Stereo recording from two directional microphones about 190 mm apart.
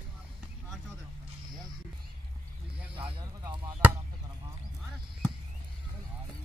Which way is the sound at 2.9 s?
30° right (ahead or behind).